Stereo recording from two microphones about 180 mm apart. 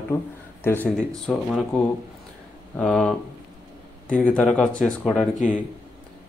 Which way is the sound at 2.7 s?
5° left (ahead or behind).